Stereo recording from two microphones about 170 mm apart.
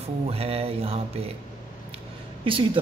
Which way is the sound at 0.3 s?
35° right (ahead or behind).